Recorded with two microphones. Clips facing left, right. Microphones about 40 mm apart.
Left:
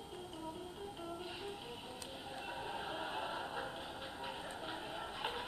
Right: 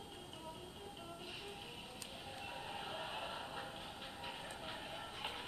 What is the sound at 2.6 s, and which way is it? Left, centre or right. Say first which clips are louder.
Music: left 3 dB; centre.